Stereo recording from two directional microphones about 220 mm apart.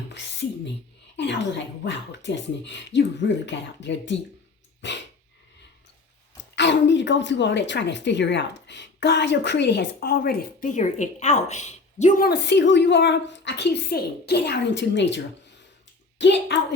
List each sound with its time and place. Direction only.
0.1 s a woman's voice: 55° left (ahead or behind)
4.8 s dog: 55° left (ahead or behind)
6.3 s a woman's voice: 55° left (ahead or behind)